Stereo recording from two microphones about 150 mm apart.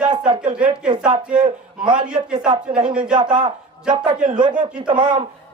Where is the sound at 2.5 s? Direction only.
35° right (ahead or behind).